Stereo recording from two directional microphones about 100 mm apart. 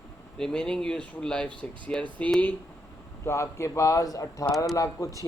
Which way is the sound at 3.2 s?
30° left (ahead or behind).